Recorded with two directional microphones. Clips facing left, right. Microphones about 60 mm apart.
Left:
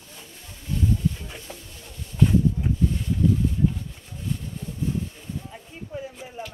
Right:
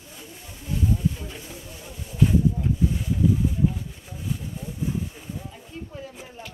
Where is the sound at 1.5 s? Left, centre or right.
Centre.